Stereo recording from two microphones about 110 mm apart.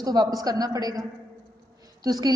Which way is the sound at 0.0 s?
35° right (ahead or behind).